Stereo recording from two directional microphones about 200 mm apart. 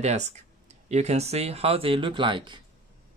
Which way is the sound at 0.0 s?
35° right (ahead or behind).